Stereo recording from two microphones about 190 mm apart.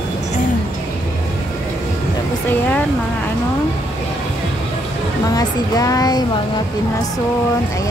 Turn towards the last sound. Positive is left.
turn(degrees=20)  # may be behind; listen again after turning